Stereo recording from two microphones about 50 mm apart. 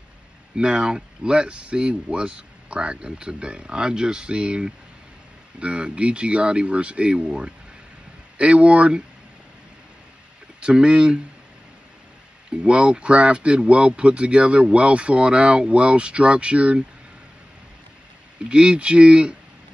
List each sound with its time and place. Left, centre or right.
0.6 s speech: centre
10.6 s speech: right
12.4 s speech: right
18.5 s speech: centre